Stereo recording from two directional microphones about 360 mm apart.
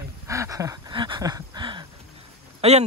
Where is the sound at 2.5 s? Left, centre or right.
Centre.